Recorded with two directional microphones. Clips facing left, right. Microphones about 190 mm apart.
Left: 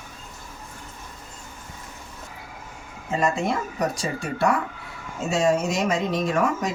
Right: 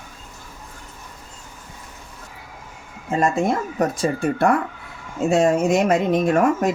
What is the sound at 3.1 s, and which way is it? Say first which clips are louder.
Speech: right 4 dB; 50° right (ahead or behind).